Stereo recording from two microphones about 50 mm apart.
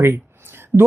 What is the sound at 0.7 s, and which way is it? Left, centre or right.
Speech, right.